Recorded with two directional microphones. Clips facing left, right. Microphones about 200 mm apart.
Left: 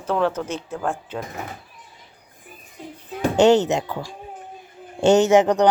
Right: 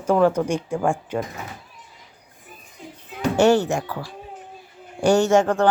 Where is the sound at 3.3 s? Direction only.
20° left (ahead or behind).